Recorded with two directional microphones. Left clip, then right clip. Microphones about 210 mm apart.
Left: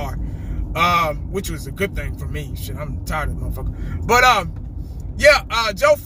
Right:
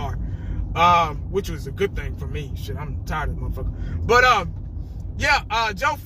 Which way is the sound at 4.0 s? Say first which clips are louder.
Left 2 dB; 20° left (ahead or behind).